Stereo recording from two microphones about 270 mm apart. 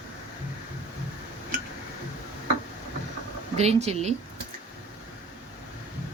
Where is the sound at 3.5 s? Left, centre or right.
Right.